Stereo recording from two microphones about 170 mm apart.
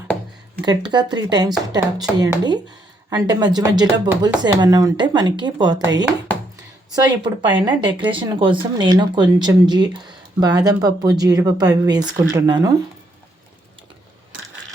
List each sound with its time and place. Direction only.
0.6 s speech: 25° right (ahead or behind)